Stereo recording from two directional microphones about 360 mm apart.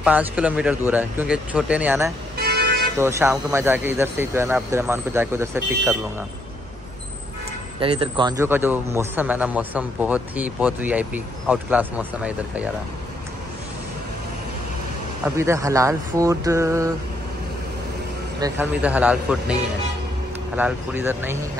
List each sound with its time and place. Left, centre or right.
0.0 s a man's voice: centre
2.3 s vehicle: right
3.0 s speech: centre
7.8 s a man's voice: centre
15.2 s speech: centre
18.4 s a man's voice: centre